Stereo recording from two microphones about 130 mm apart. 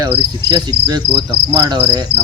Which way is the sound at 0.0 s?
30° right (ahead or behind).